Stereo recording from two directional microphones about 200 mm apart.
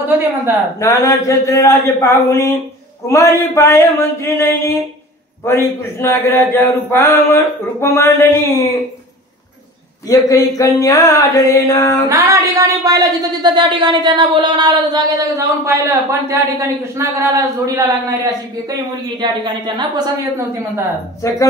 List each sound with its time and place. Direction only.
0.7 s mantra: 15° left (ahead or behind)
10.0 s mantra: 15° left (ahead or behind)
12.1 s speech: 15° right (ahead or behind)